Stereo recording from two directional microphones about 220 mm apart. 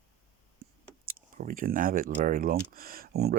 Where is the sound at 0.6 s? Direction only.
45° right (ahead or behind).